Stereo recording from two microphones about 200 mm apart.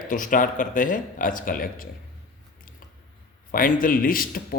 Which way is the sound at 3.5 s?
45° left (ahead or behind).